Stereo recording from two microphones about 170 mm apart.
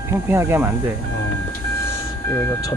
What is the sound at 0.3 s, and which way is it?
Speech, 15° right (ahead or behind).